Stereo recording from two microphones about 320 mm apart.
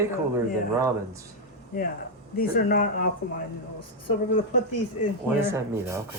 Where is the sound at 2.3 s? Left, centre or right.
Left.